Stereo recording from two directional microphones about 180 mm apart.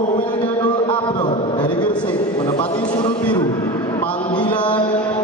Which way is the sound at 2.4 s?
25° left (ahead or behind).